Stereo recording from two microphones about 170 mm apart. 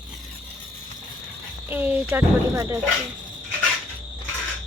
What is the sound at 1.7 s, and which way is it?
A woman's voice, 10° right (ahead or behind).